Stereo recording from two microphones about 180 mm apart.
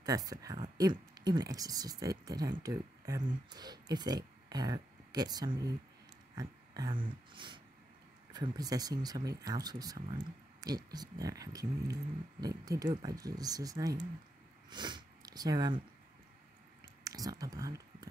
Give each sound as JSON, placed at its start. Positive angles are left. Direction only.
{"t": 0.0, "sound": "speech", "side_deg": -20}
{"t": 6.3, "sound": "dog", "side_deg": -20}
{"t": 8.3, "sound": "speech", "side_deg": -20}
{"t": 17.0, "sound": "speech", "side_deg": -20}